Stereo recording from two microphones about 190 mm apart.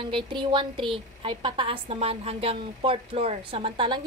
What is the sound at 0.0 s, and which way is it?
A woman's voice, 25° right (ahead or behind).